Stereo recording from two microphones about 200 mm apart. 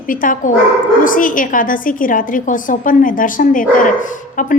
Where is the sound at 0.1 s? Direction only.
40° left (ahead or behind).